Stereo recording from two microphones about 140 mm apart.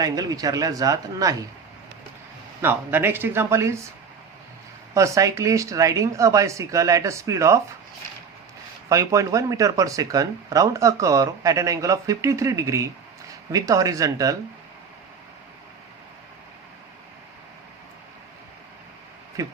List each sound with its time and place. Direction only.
0.0 s speech: 25° right (ahead or behind)
2.6 s speech: 15° right (ahead or behind)
4.9 s speech: 20° right (ahead or behind)
8.9 s speech: 25° right (ahead or behind)
19.4 s speech: 25° right (ahead or behind)